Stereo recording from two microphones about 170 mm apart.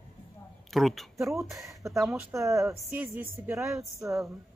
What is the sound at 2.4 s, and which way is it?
A man's voice, 20° right (ahead or behind).